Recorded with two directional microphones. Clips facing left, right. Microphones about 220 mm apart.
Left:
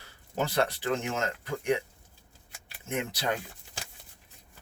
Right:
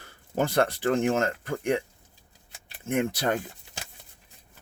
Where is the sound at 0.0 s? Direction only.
50° right (ahead or behind).